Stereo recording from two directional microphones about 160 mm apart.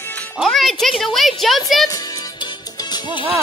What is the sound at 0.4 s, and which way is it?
Speech, centre (ahead or behind).